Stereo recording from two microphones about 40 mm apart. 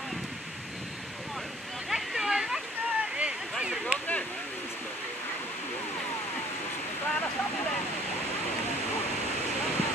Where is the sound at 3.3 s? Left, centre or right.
Centre.